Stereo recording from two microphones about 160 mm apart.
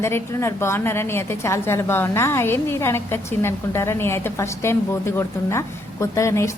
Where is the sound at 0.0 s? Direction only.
15° left (ahead or behind).